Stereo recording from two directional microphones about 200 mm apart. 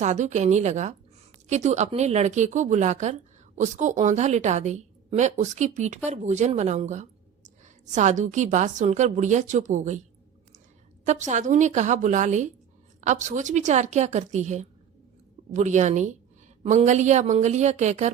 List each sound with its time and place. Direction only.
0.0 s a woman's voice: 35° right (ahead or behind)
11.0 s a woman's voice: 35° right (ahead or behind)